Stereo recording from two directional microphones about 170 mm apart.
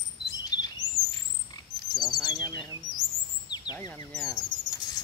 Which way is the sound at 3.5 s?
25° left (ahead or behind).